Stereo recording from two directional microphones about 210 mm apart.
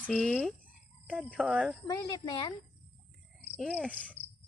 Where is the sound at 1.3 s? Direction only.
5° right (ahead or behind).